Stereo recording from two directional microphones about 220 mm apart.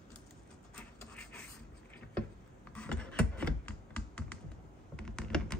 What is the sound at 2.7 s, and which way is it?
Computer keyboard, 5° left (ahead or behind).